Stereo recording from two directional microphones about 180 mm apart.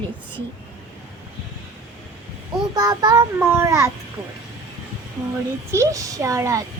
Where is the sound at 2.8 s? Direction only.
25° right (ahead or behind).